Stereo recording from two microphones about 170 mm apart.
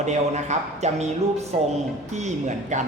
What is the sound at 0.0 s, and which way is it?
A man's voice, 45° right (ahead or behind).